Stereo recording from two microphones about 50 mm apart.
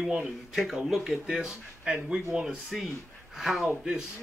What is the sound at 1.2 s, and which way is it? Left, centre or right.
Speech, centre.